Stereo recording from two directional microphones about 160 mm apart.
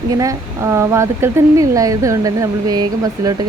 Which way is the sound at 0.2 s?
20° right (ahead or behind).